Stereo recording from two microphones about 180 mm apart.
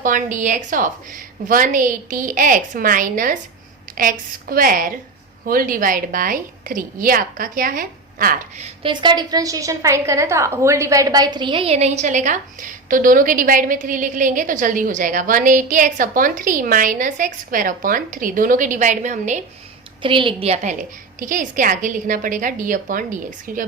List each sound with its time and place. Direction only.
0.0 s a woman's voice: 45° right (ahead or behind)
8.6 s a woman's voice: 30° right (ahead or behind)
20.0 s a woman's voice: 30° right (ahead or behind); by 23.6 s 50° right (ahead or behind)